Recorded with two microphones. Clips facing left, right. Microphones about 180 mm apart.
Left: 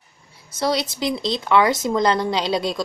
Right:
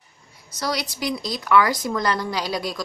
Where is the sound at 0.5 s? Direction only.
25° left (ahead or behind).